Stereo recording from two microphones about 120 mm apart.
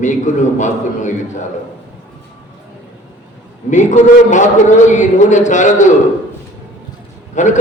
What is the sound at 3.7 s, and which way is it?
A man's voice, 90° left.